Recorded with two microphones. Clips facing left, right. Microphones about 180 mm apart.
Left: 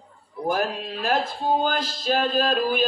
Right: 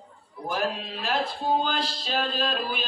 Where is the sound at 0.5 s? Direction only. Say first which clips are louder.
Left 2 dB; 45° left (ahead or behind).